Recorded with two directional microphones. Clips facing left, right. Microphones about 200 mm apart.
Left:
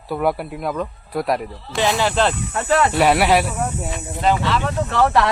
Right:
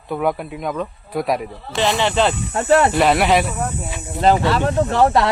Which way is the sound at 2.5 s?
35° right (ahead or behind).